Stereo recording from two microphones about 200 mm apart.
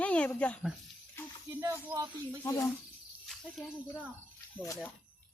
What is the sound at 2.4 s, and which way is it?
Speech, 15° left (ahead or behind).